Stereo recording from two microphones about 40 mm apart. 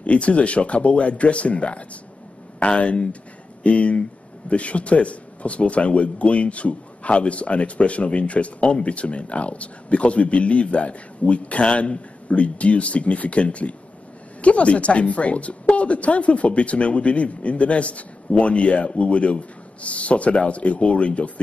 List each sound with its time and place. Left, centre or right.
0.0 s a man's voice: left